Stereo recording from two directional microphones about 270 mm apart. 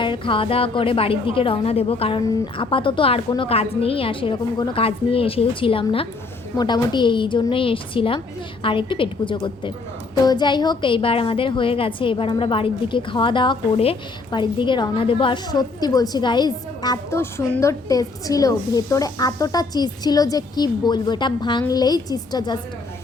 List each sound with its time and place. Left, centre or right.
0.0 s a woman's voice: centre